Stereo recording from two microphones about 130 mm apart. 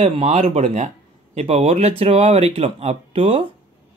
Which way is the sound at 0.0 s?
55° right (ahead or behind).